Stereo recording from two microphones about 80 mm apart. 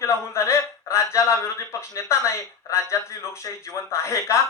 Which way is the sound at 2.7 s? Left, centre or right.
Left.